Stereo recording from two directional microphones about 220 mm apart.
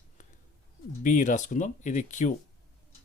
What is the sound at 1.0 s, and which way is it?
Speech, 35° left (ahead or behind).